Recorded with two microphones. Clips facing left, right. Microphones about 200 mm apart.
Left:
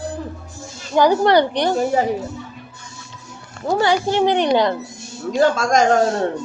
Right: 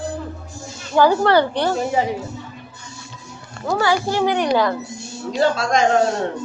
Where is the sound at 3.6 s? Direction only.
20° left (ahead or behind).